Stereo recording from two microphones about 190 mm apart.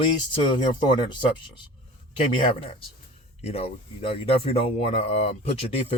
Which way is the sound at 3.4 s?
30° left (ahead or behind).